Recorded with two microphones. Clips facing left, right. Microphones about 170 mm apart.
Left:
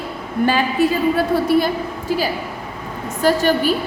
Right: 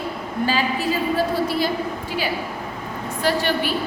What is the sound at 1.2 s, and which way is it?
Speech, 55° left (ahead or behind).